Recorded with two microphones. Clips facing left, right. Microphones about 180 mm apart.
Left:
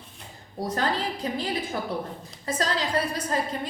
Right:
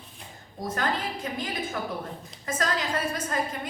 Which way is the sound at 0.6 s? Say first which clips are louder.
Left 2 dB; 35° left (ahead or behind).